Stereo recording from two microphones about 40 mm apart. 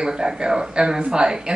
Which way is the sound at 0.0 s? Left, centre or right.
Centre.